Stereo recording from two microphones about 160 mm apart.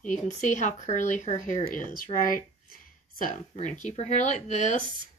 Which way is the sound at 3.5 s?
50° left (ahead or behind).